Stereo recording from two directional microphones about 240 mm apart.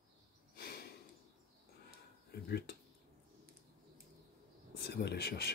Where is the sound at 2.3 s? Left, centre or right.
Left.